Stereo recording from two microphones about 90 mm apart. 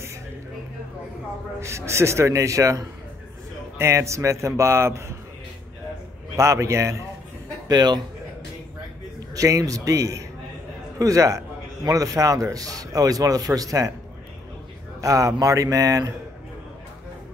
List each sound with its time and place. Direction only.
1.6 s a man's voice: 30° right (ahead or behind)
6.3 s a man's voice: 35° right (ahead or behind)
7.6 s a man's voice: 50° right (ahead or behind)
9.3 s a man's voice: 40° right (ahead or behind)
15.0 s a man's voice: 40° right (ahead or behind)